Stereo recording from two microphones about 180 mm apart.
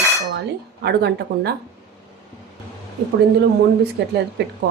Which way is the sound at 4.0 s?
65° right (ahead or behind).